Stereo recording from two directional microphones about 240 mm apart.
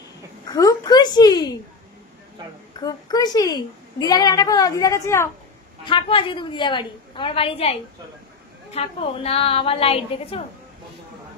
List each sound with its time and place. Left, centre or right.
0.5 s a woman's voice: centre
2.8 s a woman's voice: centre